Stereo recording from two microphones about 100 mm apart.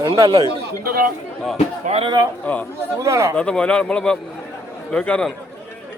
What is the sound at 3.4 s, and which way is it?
A man's voice, 10° left (ahead or behind).